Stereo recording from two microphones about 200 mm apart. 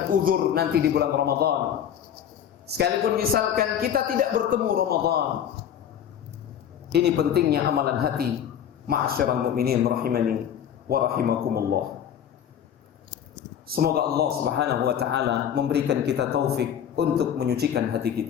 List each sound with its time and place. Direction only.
0.1 s a man's voice: 45° right (ahead or behind)
2.6 s a man's voice: 50° right (ahead or behind)
6.9 s a man's voice: 55° right (ahead or behind)
13.7 s a man's voice: 50° right (ahead or behind)